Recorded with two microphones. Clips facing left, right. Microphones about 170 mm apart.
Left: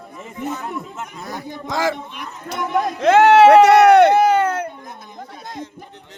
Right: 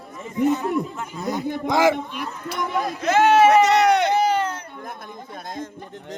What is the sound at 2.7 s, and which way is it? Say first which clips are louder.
Speech: left 7 dB; 55° left (ahead or behind).